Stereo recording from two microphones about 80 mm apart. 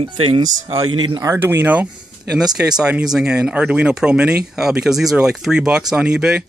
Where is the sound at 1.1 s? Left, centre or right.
Right.